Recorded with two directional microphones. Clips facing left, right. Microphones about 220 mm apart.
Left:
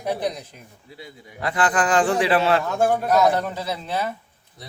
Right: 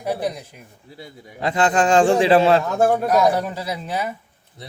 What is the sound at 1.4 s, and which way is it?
A man's voice, 25° right (ahead or behind).